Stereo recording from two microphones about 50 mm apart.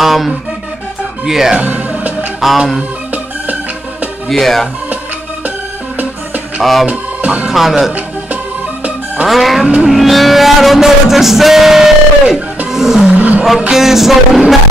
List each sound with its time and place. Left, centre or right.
0.0 s music: centre
1.6 s music: right
2.4 s music: centre
4.3 s music: centre
6.6 s music: centre
6.9 s music: right
7.5 s music: centre
9.3 s music: centre
12.7 s roar: centre
13.1 s roar: right
13.7 s music: centre